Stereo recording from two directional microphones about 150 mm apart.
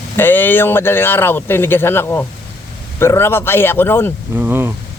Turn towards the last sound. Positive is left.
turn(degrees=-15)  # may be behind; listen again after turning